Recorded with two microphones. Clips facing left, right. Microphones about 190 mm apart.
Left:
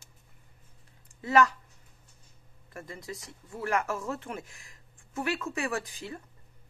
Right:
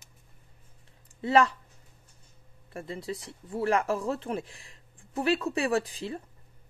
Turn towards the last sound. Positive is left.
turn(degrees=-35)  # may be behind; listen again after turning